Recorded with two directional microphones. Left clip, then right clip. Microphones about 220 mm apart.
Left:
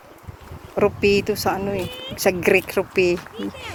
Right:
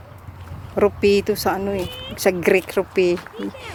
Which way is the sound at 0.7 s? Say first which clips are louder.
Right 1 dB; 10° right (ahead or behind).